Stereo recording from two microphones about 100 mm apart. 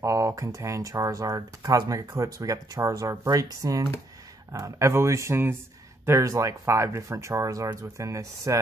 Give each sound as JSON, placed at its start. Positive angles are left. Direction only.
{"t": 0.0, "sound": "speech", "side_deg": -30}